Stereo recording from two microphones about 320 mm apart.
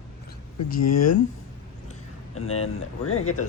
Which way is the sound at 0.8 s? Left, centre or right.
Left.